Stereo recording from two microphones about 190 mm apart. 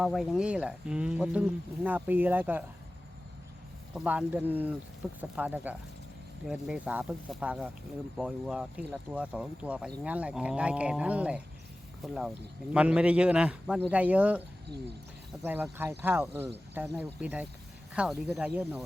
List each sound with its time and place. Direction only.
0.0 s speech: centre (ahead or behind)
3.9 s a man's voice: 5° right (ahead or behind)
15.8 s a man's voice: 10° right (ahead or behind)